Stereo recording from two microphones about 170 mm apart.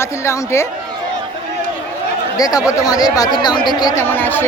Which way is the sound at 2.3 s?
20° left (ahead or behind).